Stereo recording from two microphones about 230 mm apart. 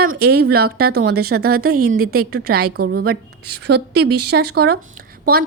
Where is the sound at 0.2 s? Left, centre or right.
Right.